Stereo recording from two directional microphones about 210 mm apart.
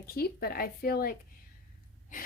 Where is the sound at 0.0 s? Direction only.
45° left (ahead or behind).